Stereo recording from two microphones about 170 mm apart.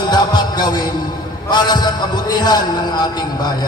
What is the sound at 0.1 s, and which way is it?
Music, 25° left (ahead or behind).